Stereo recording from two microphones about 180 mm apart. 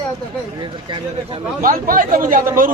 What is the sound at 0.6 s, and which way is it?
Speech, 25° right (ahead or behind).